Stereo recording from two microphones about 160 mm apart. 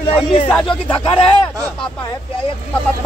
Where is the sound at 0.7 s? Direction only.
30° left (ahead or behind).